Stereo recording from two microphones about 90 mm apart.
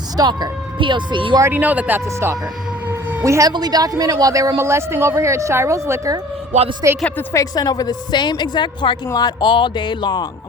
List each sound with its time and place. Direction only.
0.2 s speech: 50° right (ahead or behind)
1.5 s a man's voice: 15° right (ahead or behind)
2.0 s speech: 35° right (ahead or behind)
2.9 s a sound: 20° right (ahead or behind)
3.2 s speech: 35° right (ahead or behind)
3.5 s speech: 50° right (ahead or behind)
7.3 s a woman's voice: 45° left (ahead or behind)